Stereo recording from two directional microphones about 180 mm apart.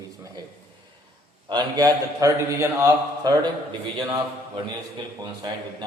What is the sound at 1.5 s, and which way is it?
A man's voice, 20° right (ahead or behind).